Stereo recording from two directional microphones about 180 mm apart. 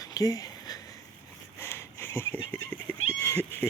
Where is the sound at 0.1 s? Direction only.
20° left (ahead or behind).